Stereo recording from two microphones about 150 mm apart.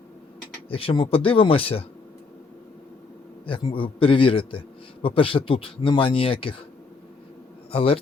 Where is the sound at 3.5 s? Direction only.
35° left (ahead or behind).